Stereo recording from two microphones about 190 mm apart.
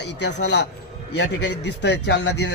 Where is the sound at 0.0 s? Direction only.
65° left (ahead or behind).